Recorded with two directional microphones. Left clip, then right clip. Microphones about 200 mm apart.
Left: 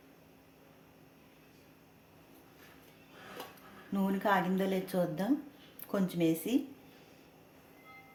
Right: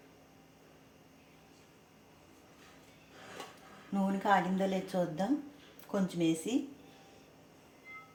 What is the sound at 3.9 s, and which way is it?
Speech, 25° left (ahead or behind).